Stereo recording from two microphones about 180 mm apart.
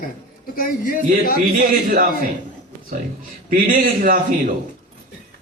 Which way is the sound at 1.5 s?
50° right (ahead or behind).